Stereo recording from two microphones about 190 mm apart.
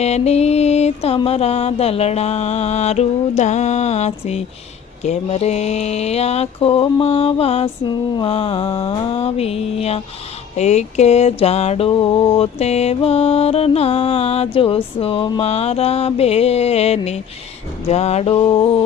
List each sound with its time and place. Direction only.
0.0 s mantra: 35° left (ahead or behind)